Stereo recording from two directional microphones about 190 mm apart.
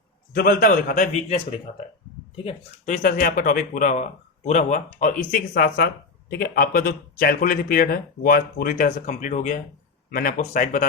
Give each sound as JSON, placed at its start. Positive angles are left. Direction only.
{"t": 0.3, "sound": "speech", "side_deg": 50}
{"t": 2.3, "sound": "speech", "side_deg": 30}